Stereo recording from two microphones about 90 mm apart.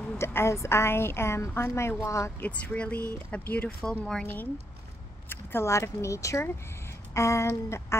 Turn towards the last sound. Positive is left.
turn(degrees=30)  # may be behind; listen again after turning